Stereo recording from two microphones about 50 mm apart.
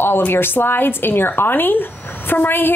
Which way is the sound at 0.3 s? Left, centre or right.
Left.